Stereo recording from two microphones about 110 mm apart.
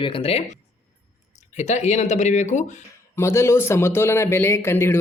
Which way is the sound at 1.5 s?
90° left.